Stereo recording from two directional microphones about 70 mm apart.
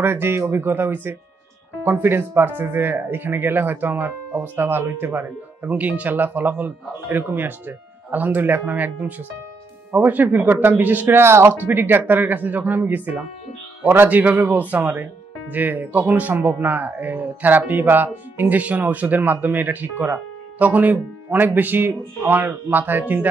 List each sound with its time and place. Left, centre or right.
0.0 s speech: right